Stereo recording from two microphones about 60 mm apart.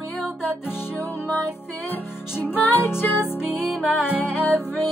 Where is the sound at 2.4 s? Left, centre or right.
Left.